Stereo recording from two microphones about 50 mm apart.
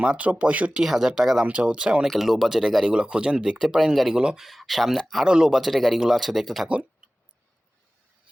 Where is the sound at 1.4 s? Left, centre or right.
Right.